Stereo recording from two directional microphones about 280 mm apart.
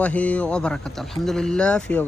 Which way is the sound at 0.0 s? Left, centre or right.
Centre.